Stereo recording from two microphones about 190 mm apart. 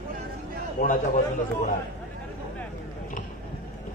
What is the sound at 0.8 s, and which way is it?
Speech, 45° left (ahead or behind).